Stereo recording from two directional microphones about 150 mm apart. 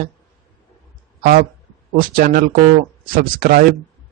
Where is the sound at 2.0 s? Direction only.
70° right (ahead or behind).